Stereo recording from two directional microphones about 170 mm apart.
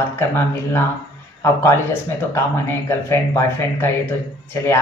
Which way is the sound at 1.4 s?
15° left (ahead or behind).